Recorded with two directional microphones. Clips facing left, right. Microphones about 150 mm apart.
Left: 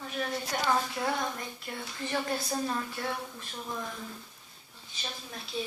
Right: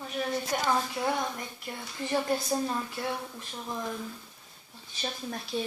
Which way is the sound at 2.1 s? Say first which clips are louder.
Right 4 dB; 20° right (ahead or behind).